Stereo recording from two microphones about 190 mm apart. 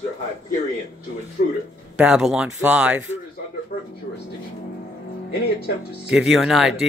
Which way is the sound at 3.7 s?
50° left (ahead or behind).